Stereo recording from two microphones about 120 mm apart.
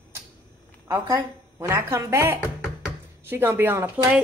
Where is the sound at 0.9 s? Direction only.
25° right (ahead or behind).